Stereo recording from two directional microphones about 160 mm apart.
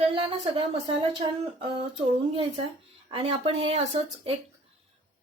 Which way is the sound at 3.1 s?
35° right (ahead or behind).